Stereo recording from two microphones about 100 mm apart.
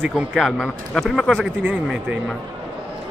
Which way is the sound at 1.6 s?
15° right (ahead or behind).